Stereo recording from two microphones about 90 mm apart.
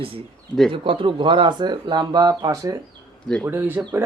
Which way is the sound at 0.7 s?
75° right (ahead or behind).